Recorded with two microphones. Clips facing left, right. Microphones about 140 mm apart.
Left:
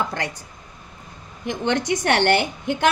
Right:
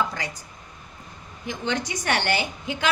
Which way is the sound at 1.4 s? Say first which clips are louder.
Left 5 dB; 60° left (ahead or behind).